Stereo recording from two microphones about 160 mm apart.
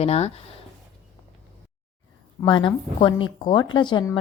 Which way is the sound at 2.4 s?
30° left (ahead or behind).